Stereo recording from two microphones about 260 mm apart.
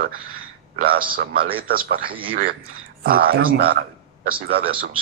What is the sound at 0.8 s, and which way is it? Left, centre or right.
Speech, right.